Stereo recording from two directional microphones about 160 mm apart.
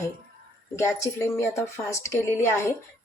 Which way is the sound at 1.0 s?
15° left (ahead or behind).